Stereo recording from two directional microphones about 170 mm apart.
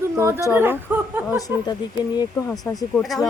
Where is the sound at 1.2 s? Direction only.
20° left (ahead or behind).